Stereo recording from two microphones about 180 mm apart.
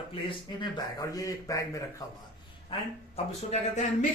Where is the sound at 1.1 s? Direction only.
20° left (ahead or behind).